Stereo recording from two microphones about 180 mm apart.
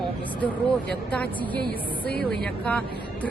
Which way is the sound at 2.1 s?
60° left (ahead or behind).